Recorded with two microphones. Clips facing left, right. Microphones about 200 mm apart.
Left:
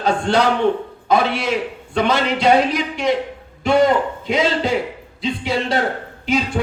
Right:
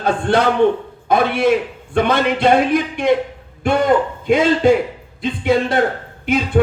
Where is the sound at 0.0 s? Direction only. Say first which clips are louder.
Right 1 dB; 55° right (ahead or behind).